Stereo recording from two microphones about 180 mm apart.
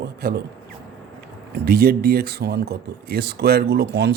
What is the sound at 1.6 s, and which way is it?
Speech, 55° right (ahead or behind).